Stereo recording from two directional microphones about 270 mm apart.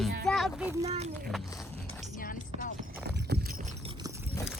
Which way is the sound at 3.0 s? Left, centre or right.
Right.